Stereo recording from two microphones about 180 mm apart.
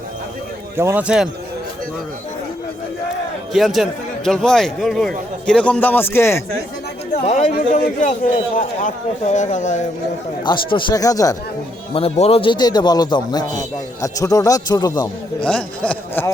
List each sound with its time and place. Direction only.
0.8 s speech: 10° right (ahead or behind)
3.5 s a man's voice: centre (ahead or behind)
7.3 s a man's voice: 40° left (ahead or behind)
10.4 s a man's voice: 25° left (ahead or behind)
11.9 s a man's voice: 35° left (ahead or behind)
15.4 s speech: 5° left (ahead or behind)